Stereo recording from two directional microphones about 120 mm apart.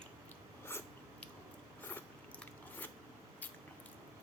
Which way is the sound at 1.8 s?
15° left (ahead or behind).